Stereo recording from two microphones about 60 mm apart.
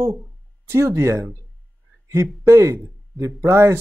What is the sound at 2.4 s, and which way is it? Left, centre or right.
Speech, right.